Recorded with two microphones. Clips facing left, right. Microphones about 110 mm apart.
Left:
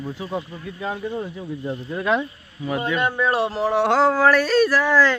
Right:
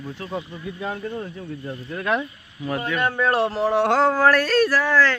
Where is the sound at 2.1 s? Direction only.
5° left (ahead or behind).